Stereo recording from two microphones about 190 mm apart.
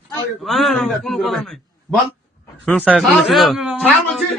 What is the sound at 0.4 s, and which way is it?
A man's voice, centre (ahead or behind).